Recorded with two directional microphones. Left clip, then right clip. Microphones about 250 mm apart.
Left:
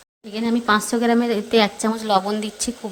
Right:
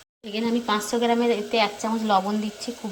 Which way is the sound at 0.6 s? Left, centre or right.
Centre.